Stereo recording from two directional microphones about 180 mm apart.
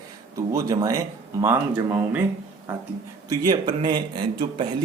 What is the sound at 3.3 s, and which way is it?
Speech, 25° right (ahead or behind).